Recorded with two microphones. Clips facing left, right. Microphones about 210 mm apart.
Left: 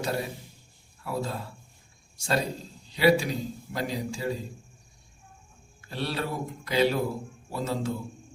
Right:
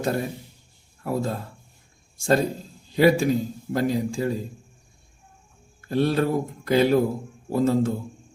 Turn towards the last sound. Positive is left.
turn(degrees=-50)  # may be behind; listen again after turning